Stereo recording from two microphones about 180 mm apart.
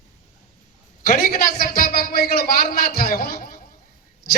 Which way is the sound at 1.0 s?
50° left (ahead or behind).